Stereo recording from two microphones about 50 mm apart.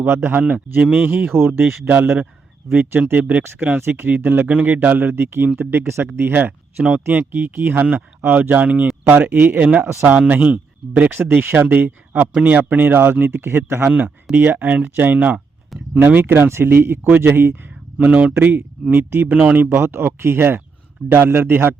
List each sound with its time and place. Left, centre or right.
0.2 s a man's voice: right
1.3 s speech: right
1.9 s a man's voice: right
7.9 s a man's voice: right
11.2 s a man's voice: right
15.7 s speech: centre
16.0 s speech: right
18.0 s a man's voice: right
19.3 s speech: right
19.8 s speech: right